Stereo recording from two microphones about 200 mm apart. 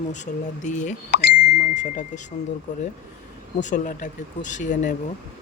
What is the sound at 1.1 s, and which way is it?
Speech, 55° left (ahead or behind).